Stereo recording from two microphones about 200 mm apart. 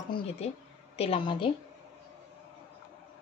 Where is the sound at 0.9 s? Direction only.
30° left (ahead or behind).